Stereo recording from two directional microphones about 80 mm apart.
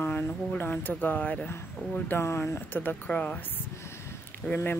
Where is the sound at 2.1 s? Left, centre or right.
Left.